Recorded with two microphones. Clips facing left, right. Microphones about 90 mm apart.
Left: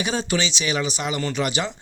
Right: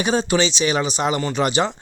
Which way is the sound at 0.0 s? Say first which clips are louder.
Right 5 dB; 30° right (ahead or behind).